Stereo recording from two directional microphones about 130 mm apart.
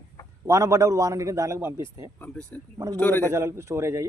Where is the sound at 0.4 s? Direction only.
20° right (ahead or behind).